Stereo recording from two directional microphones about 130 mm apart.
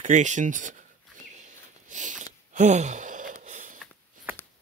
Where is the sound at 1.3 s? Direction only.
70° right (ahead or behind).